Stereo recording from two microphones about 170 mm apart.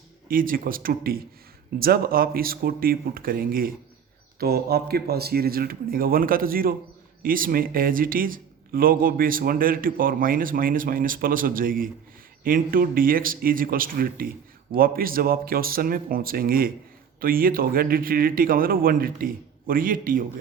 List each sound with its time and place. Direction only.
0.3 s speech: 55° right (ahead or behind)